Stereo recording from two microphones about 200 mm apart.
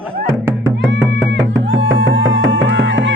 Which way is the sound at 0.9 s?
65° right (ahead or behind).